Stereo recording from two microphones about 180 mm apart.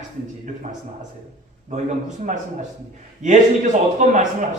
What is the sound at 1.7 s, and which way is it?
A man's voice, 40° right (ahead or behind).